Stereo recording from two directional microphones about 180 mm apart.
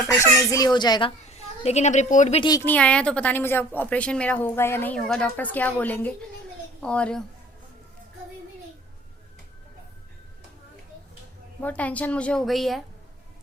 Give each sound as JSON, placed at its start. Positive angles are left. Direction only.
{"t": 0.3, "sound": "a child's voice", "side_deg": 20}
{"t": 1.6, "sound": "speech", "side_deg": 40}
{"t": 2.4, "sound": "a child's voice", "side_deg": 20}
{"t": 2.6, "sound": "a woman's voice", "side_deg": 5}
{"t": 11.6, "sound": "a woman's voice", "side_deg": 10}